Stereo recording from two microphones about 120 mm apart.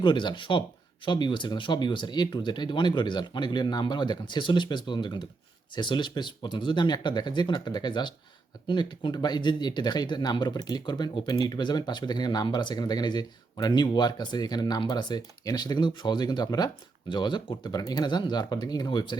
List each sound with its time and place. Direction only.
0.0 s speech: 40° left (ahead or behind)